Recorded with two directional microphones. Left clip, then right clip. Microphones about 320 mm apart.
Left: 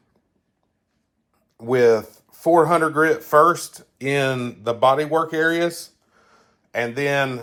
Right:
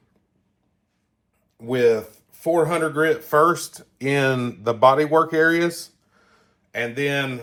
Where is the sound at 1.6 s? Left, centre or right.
Left.